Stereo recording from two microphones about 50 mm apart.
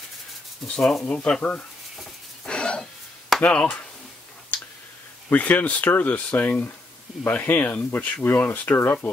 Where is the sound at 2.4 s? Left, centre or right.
Centre.